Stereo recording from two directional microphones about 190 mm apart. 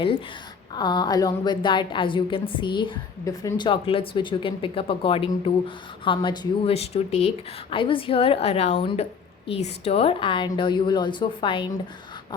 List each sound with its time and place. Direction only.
0.7 s a woman's voice: 20° left (ahead or behind)